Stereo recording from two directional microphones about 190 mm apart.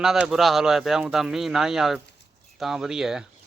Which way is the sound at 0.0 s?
Centre (ahead or behind).